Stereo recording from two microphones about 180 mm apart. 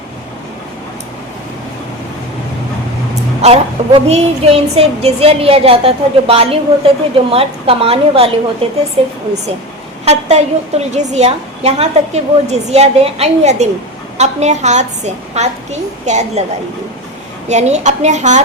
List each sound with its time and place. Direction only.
3.8 s music: 35° right (ahead or behind)
17.5 s music: 40° right (ahead or behind)